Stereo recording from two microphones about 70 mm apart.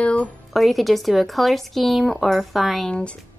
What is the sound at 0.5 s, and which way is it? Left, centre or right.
A woman's voice, centre.